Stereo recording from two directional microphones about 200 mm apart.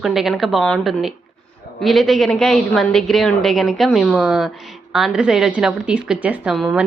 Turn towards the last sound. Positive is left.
turn(degrees=-5)  # may be behind; listen again after turning